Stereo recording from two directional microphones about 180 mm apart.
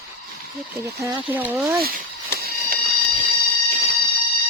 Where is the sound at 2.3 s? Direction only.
55° right (ahead or behind).